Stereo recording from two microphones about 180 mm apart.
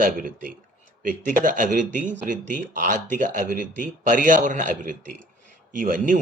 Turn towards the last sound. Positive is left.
turn(degrees=-50)  # may be behind; listen again after turning